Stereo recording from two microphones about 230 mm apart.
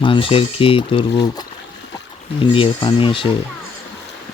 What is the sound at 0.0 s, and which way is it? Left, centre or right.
Speech, left.